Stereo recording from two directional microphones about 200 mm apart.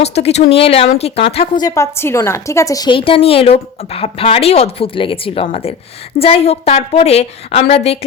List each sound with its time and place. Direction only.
0.0 s speech: 30° left (ahead or behind)
1.6 s a woman's voice: 15° left (ahead or behind); by 7.6 s 30° left (ahead or behind)